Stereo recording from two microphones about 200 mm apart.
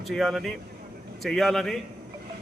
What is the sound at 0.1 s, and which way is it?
A man's voice, centre (ahead or behind).